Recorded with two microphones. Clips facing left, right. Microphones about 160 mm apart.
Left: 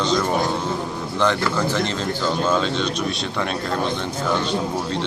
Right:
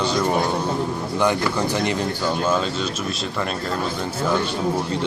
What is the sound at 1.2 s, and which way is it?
Speech, 15° right (ahead or behind).